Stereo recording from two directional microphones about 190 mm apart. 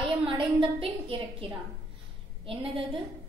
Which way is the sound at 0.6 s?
30° right (ahead or behind).